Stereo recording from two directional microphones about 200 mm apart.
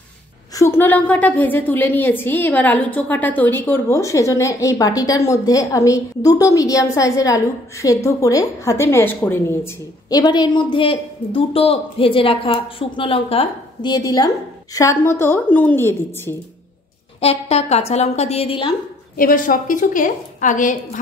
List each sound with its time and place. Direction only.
0.6 s a woman's voice: 10° left (ahead or behind)
17.2 s a woman's voice: 30° left (ahead or behind)
19.1 s a woman's voice: 45° left (ahead or behind)